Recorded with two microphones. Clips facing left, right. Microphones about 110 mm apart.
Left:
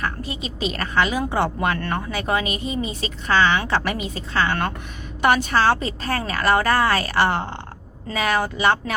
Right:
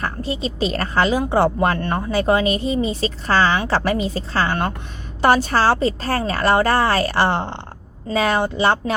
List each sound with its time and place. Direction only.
0.0 s a woman's voice: 30° right (ahead or behind)